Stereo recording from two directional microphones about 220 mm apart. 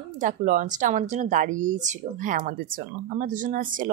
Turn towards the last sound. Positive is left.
turn(degrees=-35)  # may be behind; listen again after turning